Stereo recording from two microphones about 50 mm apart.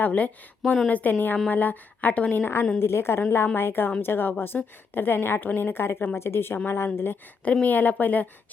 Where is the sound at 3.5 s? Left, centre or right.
Left.